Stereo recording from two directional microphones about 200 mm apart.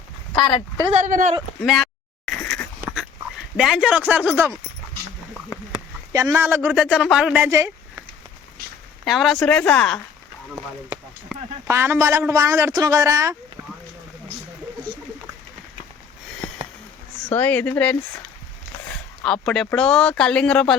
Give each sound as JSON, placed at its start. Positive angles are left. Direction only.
{"t": 0.9, "sound": "speech", "side_deg": -40}
{"t": 1.6, "sound": "a sound", "side_deg": 0}
{"t": 3.6, "sound": "a man's voice", "side_deg": -5}
{"t": 6.1, "sound": "a man's voice", "side_deg": -15}
{"t": 9.0, "sound": "speech", "side_deg": 0}
{"t": 11.3, "sound": "speech", "side_deg": 0}
{"t": 11.7, "sound": "a man's voice", "side_deg": -15}
{"t": 16.4, "sound": "a sound", "side_deg": 20}
{"t": 17.2, "sound": "a woman's voice", "side_deg": 10}
{"t": 19.2, "sound": "speech", "side_deg": 0}